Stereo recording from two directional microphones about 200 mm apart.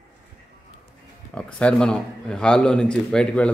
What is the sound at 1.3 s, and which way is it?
A man's voice, 5° left (ahead or behind).